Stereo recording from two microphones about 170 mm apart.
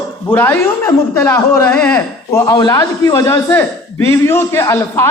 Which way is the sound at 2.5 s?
25° left (ahead or behind).